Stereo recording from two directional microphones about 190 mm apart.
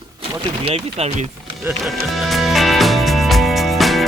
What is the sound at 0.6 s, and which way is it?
Speech, 35° right (ahead or behind).